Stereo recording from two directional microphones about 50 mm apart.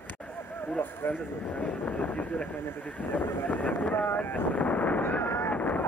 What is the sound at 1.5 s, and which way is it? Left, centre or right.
Speech, left.